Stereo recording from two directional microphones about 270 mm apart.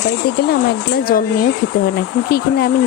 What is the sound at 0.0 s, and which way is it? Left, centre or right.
Speech, left.